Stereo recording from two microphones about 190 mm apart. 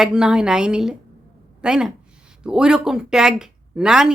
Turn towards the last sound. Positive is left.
turn(degrees=-5)  # may be behind; listen again after turning